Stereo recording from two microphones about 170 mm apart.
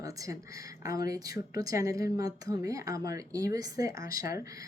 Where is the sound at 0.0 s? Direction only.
20° right (ahead or behind).